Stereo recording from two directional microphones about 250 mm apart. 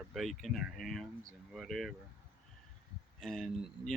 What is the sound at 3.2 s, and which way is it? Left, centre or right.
Speech, centre.